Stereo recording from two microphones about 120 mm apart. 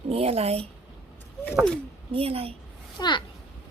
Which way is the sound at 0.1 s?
55° right (ahead or behind).